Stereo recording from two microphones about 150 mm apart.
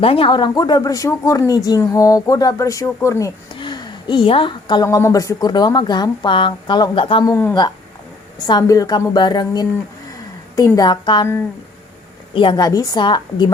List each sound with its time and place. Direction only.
0.0 s speech: 40° left (ahead or behind)
7.3 s speech: 20° left (ahead or behind)
12.3 s speech: 35° left (ahead or behind)